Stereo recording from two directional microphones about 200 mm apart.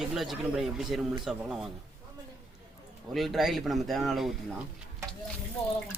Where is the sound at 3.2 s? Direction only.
Centre (ahead or behind).